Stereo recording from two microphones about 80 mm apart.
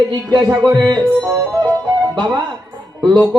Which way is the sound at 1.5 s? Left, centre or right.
Right.